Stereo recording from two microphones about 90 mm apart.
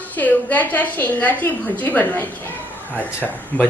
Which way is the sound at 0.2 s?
20° left (ahead or behind).